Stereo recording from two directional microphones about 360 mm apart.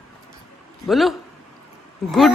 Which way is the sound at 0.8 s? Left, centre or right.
Centre.